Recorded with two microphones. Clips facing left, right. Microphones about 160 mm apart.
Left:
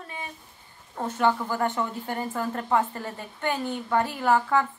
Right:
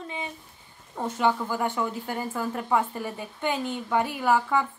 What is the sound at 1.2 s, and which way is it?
A woman's voice, 10° right (ahead or behind).